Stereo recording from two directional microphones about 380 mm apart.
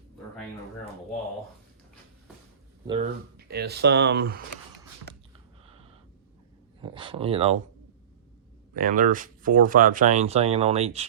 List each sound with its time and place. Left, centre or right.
2.8 s speech: centre
3.3 s speech: right
6.8 s speech: centre
8.7 s speech: right